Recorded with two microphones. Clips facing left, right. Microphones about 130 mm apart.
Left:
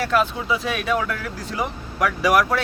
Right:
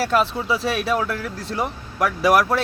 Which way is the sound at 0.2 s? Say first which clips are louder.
Right 1 dB; 5° right (ahead or behind).